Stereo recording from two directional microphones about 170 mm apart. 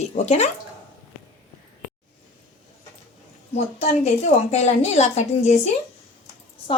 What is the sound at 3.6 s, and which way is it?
A woman's voice, 35° left (ahead or behind).